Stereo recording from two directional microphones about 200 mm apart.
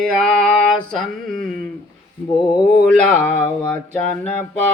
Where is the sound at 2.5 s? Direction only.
5° left (ahead or behind).